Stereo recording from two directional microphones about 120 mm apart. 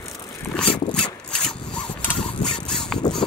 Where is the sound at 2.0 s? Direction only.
5° left (ahead or behind).